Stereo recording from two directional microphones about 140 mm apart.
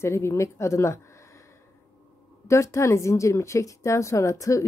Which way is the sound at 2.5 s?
20° left (ahead or behind).